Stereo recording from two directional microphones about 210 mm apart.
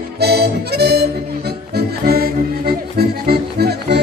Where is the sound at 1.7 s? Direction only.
45° right (ahead or behind).